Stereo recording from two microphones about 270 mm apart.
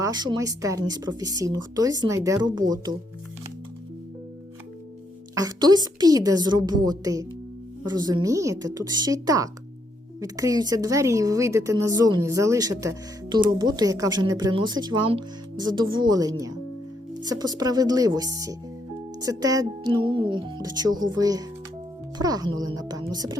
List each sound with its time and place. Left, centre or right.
0.0 s a woman's voice: centre
5.3 s a woman's voice: centre